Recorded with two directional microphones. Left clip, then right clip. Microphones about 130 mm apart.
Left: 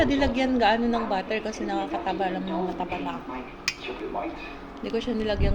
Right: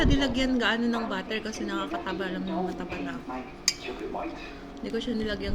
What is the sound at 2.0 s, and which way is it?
Speech, 90° left.